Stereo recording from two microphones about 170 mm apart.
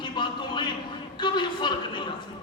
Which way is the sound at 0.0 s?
30° left (ahead or behind).